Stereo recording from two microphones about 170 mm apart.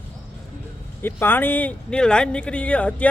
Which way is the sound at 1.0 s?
10° left (ahead or behind).